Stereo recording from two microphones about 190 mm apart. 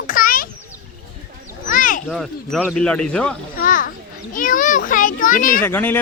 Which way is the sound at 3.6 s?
45° left (ahead or behind).